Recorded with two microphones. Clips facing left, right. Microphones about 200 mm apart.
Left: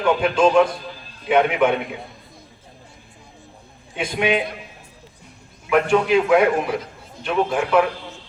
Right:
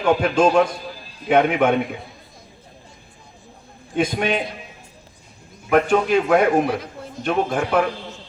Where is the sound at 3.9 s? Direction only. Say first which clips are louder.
Right 1 dB; 45° right (ahead or behind).